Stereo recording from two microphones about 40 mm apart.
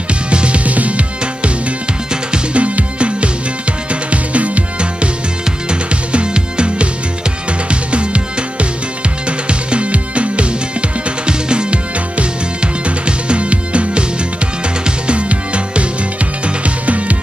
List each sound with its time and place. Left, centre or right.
0.3 s music: right
7.9 s music: right
15.0 s music: right